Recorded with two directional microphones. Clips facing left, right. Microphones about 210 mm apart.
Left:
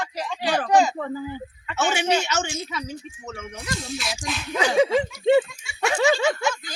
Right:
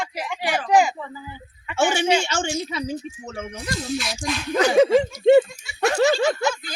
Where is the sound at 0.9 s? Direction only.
50° left (ahead or behind).